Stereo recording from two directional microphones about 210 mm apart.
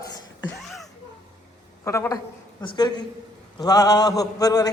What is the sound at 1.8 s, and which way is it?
A man's voice, 15° left (ahead or behind).